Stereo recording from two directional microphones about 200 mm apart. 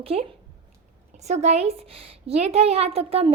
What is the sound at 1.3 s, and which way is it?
A woman's voice, 35° right (ahead or behind).